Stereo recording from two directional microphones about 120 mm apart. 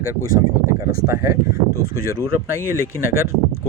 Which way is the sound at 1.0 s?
25° right (ahead or behind).